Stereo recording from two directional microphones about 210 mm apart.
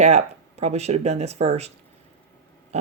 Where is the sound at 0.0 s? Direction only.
30° right (ahead or behind).